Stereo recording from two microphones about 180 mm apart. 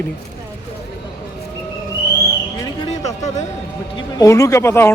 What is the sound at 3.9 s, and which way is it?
Speech, 20° left (ahead or behind).